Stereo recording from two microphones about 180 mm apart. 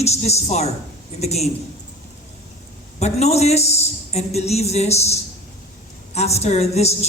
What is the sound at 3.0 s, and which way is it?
Speech, 35° left (ahead or behind).